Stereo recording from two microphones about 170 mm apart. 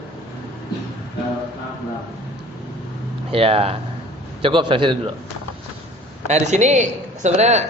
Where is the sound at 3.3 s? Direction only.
35° right (ahead or behind).